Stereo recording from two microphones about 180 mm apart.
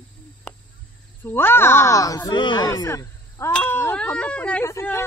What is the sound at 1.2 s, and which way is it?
Speech, 10° left (ahead or behind).